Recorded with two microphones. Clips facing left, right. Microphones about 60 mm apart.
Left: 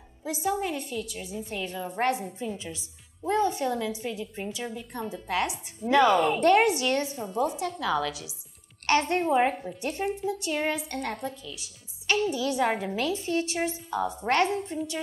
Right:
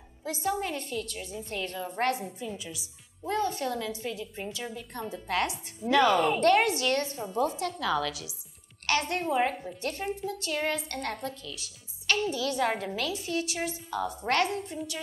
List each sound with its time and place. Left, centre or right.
0.2 s a woman's voice: centre
2.6 s a woman's voice: left
3.2 s a woman's voice: left
4.6 s a woman's voice: centre
6.4 s a woman's voice: centre
9.2 s a woman's voice: centre
9.6 s a woman's voice: centre
13.0 s a woman's voice: left
13.7 s a woman's voice: left